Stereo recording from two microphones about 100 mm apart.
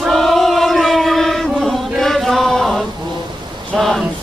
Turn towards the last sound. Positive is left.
turn(degrees=5)  # may be behind; listen again after turning